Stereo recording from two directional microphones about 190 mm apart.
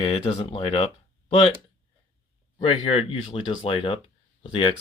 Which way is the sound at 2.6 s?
30° left (ahead or behind).